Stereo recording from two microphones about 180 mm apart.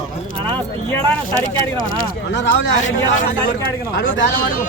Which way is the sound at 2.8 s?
45° left (ahead or behind).